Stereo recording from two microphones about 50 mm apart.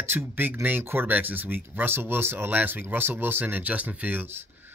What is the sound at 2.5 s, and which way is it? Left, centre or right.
Speech, right.